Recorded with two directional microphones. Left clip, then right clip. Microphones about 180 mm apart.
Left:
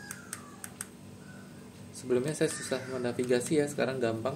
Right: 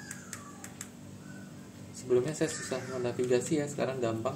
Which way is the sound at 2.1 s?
30° left (ahead or behind).